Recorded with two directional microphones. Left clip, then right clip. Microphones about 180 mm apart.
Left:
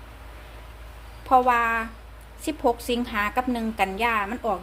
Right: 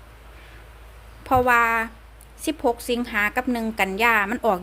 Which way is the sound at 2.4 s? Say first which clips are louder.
Right 1 dB; 25° right (ahead or behind).